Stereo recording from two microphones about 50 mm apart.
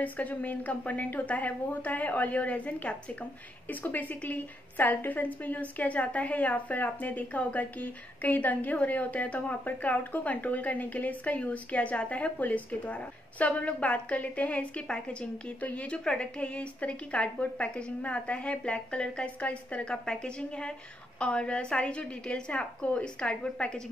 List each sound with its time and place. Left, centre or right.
0.0 s a woman's voice: left